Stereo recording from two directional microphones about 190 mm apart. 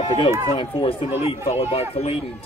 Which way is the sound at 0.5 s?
30° left (ahead or behind).